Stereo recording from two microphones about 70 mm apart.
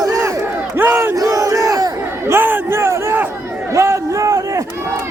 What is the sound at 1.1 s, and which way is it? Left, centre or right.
Battle cry, right.